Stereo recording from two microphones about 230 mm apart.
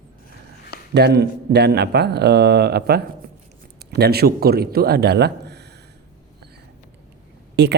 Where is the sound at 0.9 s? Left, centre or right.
Right.